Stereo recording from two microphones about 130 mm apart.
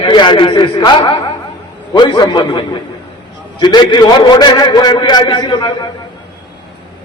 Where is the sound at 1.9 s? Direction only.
35° left (ahead or behind).